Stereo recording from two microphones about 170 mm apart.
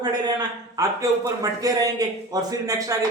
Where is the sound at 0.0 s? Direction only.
25° right (ahead or behind).